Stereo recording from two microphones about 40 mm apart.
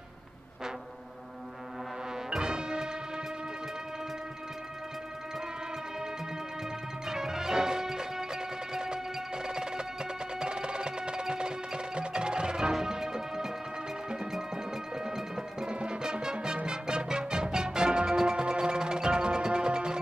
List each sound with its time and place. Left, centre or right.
2.3 s music: right
7.1 s music: centre